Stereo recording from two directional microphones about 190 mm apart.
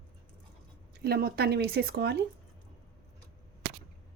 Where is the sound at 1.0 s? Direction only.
55° right (ahead or behind).